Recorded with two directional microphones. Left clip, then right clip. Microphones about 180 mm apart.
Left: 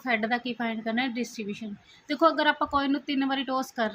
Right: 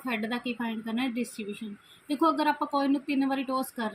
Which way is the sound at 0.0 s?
50° left (ahead or behind).